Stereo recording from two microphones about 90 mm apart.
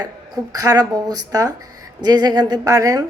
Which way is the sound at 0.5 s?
45° right (ahead or behind).